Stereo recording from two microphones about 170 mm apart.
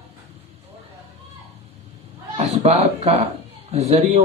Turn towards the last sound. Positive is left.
turn(degrees=-40)  # may be behind; listen again after turning